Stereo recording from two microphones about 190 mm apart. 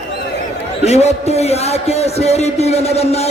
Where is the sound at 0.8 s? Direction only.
35° left (ahead or behind).